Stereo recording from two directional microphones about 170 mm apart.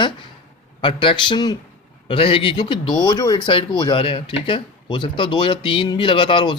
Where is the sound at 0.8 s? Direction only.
30° left (ahead or behind).